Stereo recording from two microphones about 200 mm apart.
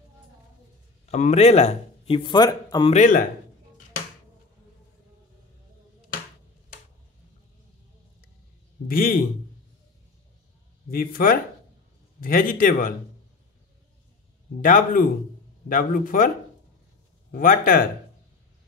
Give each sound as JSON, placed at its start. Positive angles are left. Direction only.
{"t": 1.1, "sound": "speech", "side_deg": 35}
{"t": 2.9, "sound": "a man's voice", "side_deg": 40}
{"t": 8.8, "sound": "a man's voice", "side_deg": 45}
{"t": 10.9, "sound": "a man's voice", "side_deg": 45}
{"t": 14.6, "sound": "a man's voice", "side_deg": 40}
{"t": 17.3, "sound": "a man's voice", "side_deg": 45}